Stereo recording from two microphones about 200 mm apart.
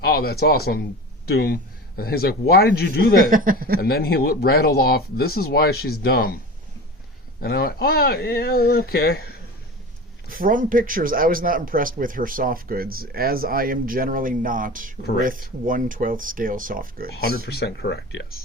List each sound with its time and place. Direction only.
0.0 s speech: 50° left (ahead or behind)
3.2 s a man's voice: 45° right (ahead or behind)
3.8 s speech: 50° left (ahead or behind)
7.4 s speech: 50° left (ahead or behind)
10.2 s a man's voice: 45° right (ahead or behind)
17.2 s speech: 55° left (ahead or behind)